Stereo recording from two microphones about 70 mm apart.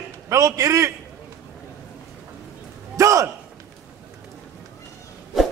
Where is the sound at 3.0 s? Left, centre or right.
Right.